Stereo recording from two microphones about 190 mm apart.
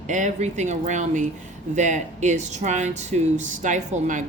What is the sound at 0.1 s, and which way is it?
Speech, 40° right (ahead or behind).